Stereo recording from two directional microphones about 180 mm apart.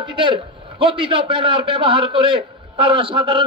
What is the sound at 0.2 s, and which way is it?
A man's voice, 30° right (ahead or behind).